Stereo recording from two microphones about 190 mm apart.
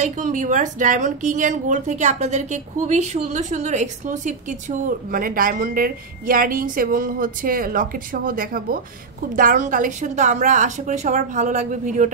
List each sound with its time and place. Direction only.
0.0 s a woman's voice: 40° right (ahead or behind)